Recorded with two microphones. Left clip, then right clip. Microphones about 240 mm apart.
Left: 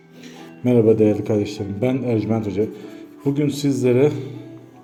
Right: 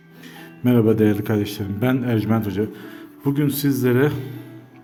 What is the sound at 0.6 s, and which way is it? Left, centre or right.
A man's voice, right.